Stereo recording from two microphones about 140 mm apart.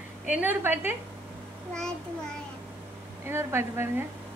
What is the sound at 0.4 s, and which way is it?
Speech, 15° right (ahead or behind).